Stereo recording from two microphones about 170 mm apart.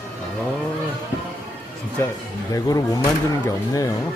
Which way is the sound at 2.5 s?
20° left (ahead or behind).